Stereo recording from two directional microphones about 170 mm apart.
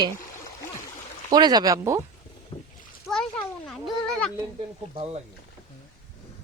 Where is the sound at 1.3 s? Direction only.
25° right (ahead or behind).